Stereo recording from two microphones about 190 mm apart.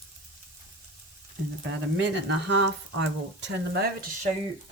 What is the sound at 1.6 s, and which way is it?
Speech, 70° right (ahead or behind).